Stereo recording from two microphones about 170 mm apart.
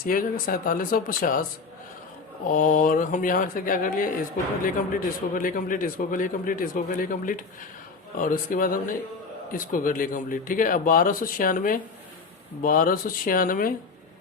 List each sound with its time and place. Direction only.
0.0 s speech: 55° left (ahead or behind)
2.5 s a man's voice: 50° left (ahead or behind)